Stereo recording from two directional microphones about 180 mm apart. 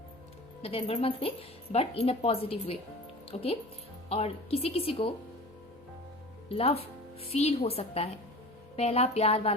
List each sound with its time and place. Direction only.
0.6 s a woman's voice: 35° left (ahead or behind)
6.5 s a woman's voice: 35° left (ahead or behind)